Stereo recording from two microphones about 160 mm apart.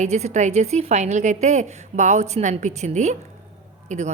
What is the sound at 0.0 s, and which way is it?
A woman's voice, 45° right (ahead or behind).